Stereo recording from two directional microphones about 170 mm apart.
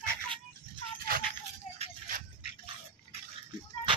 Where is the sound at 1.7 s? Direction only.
40° left (ahead or behind).